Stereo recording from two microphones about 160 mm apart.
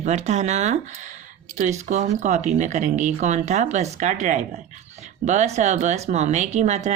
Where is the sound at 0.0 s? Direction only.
45° right (ahead or behind).